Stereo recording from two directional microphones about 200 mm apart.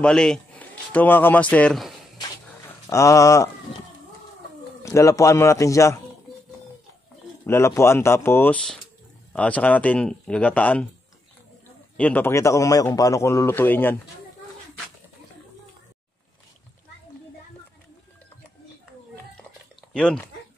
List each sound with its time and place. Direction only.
0.0 s speech: 5° left (ahead or behind)
2.9 s a man's voice: 15° left (ahead or behind)
4.8 s a man's voice: 15° left (ahead or behind)
7.4 s a man's voice: 15° left (ahead or behind)
12.0 s a man's voice: 10° left (ahead or behind)
19.9 s speech: 5° left (ahead or behind)